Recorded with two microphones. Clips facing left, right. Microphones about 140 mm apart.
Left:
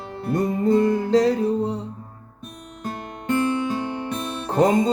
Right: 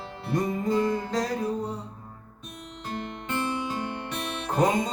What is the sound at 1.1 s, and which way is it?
Music, 25° left (ahead or behind).